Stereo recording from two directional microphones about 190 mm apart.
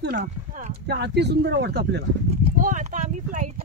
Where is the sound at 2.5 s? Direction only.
45° right (ahead or behind).